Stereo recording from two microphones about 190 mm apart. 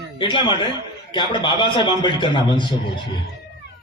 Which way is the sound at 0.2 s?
25° left (ahead or behind).